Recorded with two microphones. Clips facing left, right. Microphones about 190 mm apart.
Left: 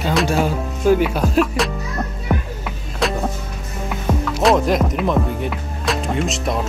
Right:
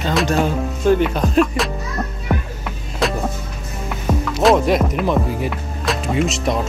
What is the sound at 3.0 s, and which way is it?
Music, centre (ahead or behind).